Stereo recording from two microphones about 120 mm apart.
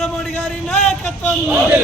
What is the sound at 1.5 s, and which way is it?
Chant, 15° right (ahead or behind).